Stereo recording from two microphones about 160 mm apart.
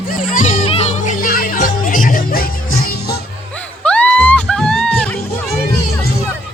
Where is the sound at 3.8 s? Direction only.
5° left (ahead or behind).